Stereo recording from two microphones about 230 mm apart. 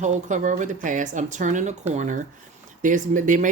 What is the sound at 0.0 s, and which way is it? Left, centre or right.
Speech, right.